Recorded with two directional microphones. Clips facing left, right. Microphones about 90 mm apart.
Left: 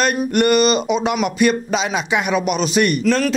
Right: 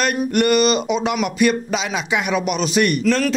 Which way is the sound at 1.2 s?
30° left (ahead or behind).